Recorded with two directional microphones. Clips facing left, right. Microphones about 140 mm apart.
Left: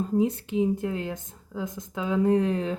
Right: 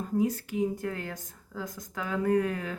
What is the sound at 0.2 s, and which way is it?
Speech, 25° left (ahead or behind).